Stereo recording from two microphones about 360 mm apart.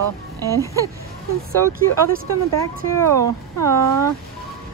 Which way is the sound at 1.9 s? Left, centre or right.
Right.